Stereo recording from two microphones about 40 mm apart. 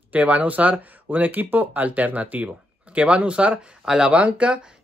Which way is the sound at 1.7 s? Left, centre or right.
Right.